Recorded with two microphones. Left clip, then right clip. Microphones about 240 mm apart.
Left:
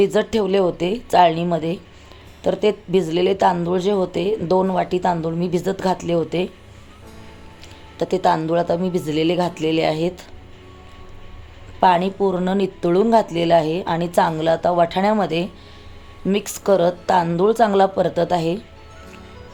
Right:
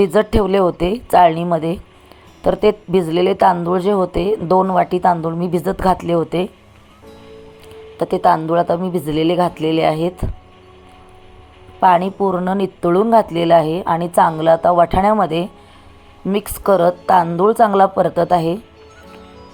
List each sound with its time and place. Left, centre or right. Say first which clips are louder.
0.0 s speech: right 3 dB; centre
7.9 s speech: right 4 dB; centre
11.8 s speech: right 3 dB; centre